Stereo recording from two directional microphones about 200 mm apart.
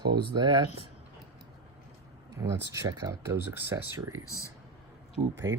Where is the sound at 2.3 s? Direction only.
15° right (ahead or behind).